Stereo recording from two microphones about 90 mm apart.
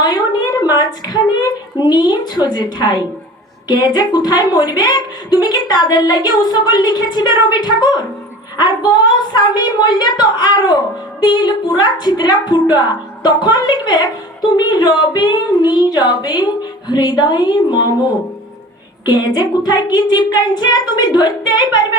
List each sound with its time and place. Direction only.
0.0 s a woman's voice: 50° left (ahead or behind)
19.0 s a woman's voice: 50° left (ahead or behind)